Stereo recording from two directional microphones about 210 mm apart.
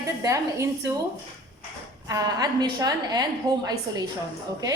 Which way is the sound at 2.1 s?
20° right (ahead or behind).